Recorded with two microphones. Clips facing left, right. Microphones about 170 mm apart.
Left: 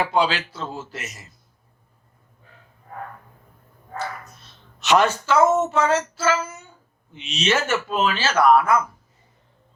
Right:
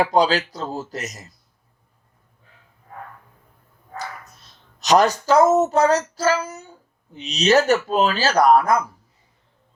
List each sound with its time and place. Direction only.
0.0 s speech: 40° right (ahead or behind)
4.8 s speech: 40° right (ahead or behind)